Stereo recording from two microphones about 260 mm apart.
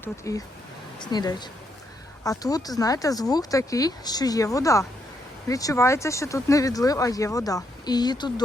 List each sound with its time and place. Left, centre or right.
0.0 s speech: centre